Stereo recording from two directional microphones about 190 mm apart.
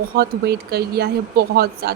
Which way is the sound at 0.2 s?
55° right (ahead or behind).